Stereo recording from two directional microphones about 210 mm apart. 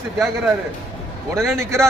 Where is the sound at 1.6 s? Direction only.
15° right (ahead or behind).